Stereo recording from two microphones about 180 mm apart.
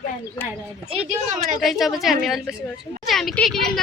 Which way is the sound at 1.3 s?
Centre (ahead or behind).